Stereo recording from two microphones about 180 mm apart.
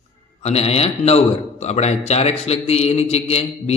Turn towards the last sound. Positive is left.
turn(degrees=35)  # may be behind; listen again after turning